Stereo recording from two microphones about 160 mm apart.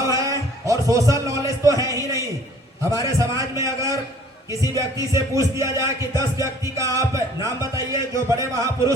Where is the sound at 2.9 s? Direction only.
20° right (ahead or behind).